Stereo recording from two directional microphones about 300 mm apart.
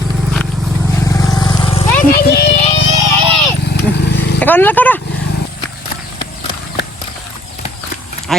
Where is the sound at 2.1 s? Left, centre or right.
Left.